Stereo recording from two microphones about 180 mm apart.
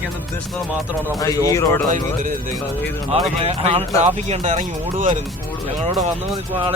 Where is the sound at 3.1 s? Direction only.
35° right (ahead or behind).